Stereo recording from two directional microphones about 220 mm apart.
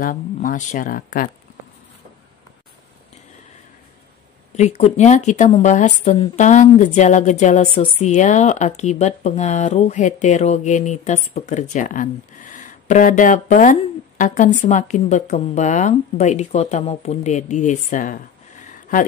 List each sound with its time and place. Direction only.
0.0 s a woman's voice: 40° left (ahead or behind)
4.6 s a woman's voice: 30° left (ahead or behind)